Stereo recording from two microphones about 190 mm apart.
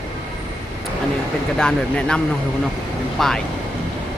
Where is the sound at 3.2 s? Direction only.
Centre (ahead or behind).